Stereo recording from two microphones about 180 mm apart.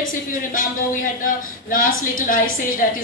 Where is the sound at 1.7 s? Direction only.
50° left (ahead or behind).